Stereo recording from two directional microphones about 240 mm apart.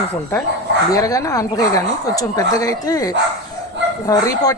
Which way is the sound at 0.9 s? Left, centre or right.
Centre.